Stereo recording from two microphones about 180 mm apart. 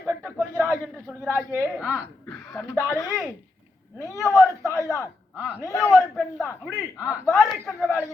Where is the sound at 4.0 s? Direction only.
15° left (ahead or behind).